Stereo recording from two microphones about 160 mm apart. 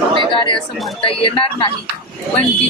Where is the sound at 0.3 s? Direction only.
30° left (ahead or behind).